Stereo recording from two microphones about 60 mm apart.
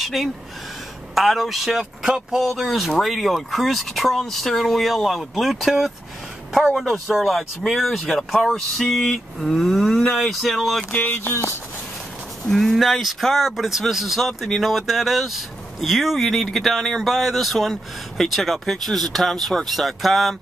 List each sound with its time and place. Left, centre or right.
0.0 s speech: centre
10.9 s speech: left
12.4 s speech: centre